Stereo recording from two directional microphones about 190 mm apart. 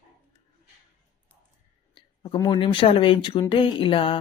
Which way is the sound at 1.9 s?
25° left (ahead or behind).